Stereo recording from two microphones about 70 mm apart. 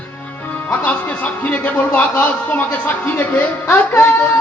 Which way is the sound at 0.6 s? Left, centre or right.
Left.